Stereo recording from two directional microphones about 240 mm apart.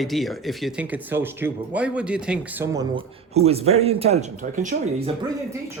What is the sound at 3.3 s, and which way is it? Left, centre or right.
Speech, right.